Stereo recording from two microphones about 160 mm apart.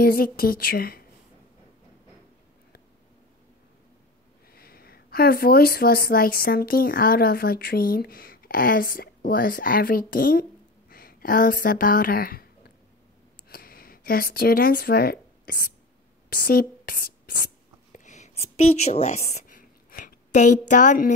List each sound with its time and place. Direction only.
0.0 s a woman's voice: 70° left (ahead or behind)
4.5 s a woman's voice: 70° left (ahead or behind)
17.9 s speech: 50° left (ahead or behind)
19.4 s a sound: 60° left (ahead or behind)